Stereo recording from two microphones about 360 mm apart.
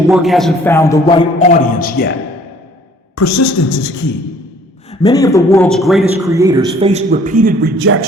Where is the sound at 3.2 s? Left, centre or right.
Left.